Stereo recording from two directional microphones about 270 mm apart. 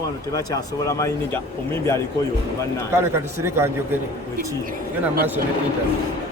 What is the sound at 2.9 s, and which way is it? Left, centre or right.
A man's voice, centre.